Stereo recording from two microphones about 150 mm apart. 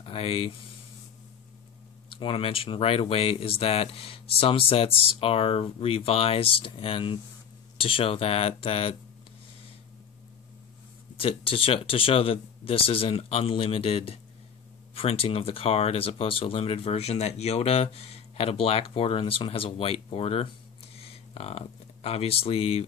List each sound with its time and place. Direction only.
0.0 s speech: 40° left (ahead or behind)
2.1 s speech: 40° left (ahead or behind)
11.1 s speech: 35° left (ahead or behind)